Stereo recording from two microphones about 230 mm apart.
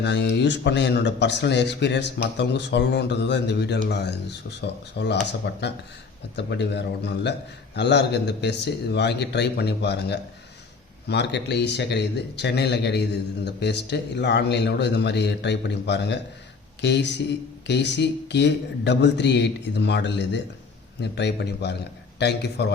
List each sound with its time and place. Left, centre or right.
0.0 s a man's voice: left